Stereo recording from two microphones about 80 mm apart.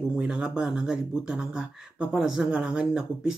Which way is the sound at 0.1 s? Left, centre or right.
Centre.